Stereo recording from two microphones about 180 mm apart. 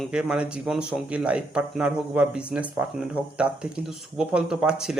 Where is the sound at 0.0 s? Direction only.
5° right (ahead or behind).